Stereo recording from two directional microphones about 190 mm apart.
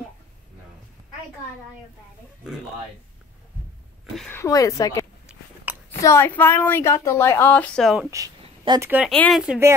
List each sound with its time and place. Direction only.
4.3 s a woman's voice: 15° left (ahead or behind); by 8.1 s centre (ahead or behind)
8.1 s speech: 15° right (ahead or behind)
9.1 s speech: centre (ahead or behind)